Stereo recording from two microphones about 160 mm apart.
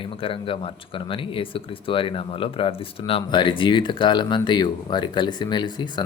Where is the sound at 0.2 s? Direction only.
35° left (ahead or behind).